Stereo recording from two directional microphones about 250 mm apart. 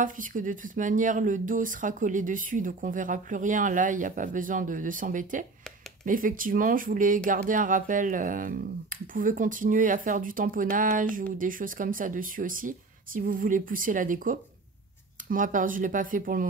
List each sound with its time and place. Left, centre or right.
0.0 s speech: right